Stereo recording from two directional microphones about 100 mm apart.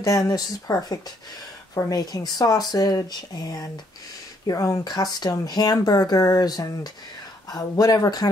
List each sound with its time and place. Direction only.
0.0 s speech: 35° left (ahead or behind)